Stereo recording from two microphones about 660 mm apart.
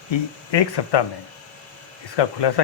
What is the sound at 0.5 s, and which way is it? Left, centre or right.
Speech, left.